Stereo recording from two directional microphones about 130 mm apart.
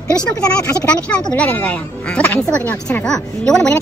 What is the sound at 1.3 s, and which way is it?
Speech, 10° left (ahead or behind).